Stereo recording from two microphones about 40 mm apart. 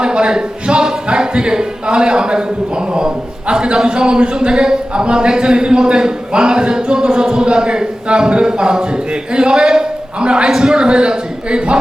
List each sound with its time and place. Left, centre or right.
0.0 s speech: right
3.5 s a man's voice: right